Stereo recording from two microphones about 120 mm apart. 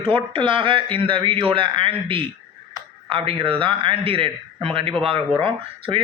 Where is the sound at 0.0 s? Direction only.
45° right (ahead or behind).